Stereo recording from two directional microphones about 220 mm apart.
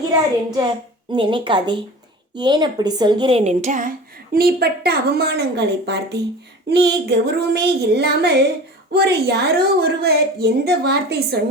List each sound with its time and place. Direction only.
1.1 s a woman's voice: 20° right (ahead or behind); by 11.3 s 50° right (ahead or behind)